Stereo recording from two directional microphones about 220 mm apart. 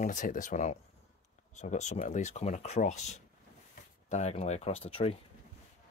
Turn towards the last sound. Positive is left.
turn(degrees=25)  # may be behind; listen again after turning